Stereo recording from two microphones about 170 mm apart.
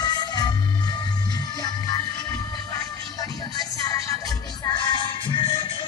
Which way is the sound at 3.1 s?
20° left (ahead or behind).